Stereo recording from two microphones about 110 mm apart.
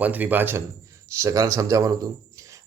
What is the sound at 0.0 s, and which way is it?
Speech, 15° right (ahead or behind).